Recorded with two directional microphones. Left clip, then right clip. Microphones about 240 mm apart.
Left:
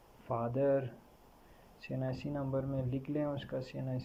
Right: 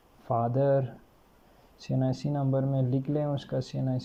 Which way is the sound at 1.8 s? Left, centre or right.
Centre.